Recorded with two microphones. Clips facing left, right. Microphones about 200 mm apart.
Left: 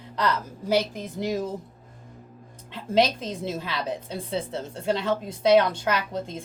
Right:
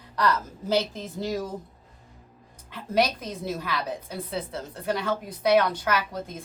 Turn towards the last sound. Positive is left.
turn(degrees=20)  # may be behind; listen again after turning